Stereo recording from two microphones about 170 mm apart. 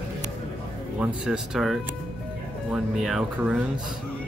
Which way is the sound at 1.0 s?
5° right (ahead or behind).